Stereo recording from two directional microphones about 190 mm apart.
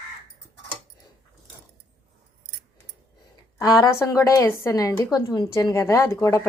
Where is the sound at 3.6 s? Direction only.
20° left (ahead or behind).